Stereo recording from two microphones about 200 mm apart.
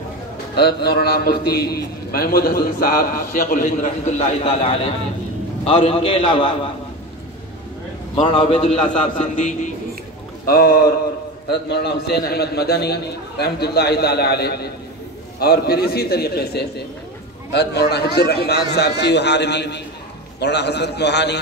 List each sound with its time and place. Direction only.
0.6 s a man's voice: 55° left (ahead or behind); by 6.5 s 25° left (ahead or behind)
8.2 s a man's voice: 25° left (ahead or behind); by 21.4 s 60° left (ahead or behind)